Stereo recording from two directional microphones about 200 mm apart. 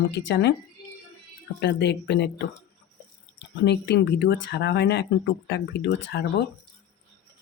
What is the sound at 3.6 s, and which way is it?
Speech, 60° left (ahead or behind).